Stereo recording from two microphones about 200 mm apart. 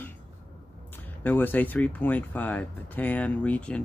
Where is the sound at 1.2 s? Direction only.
10° left (ahead or behind).